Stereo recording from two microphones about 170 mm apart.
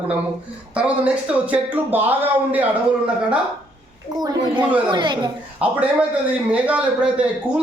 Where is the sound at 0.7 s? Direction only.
5° right (ahead or behind).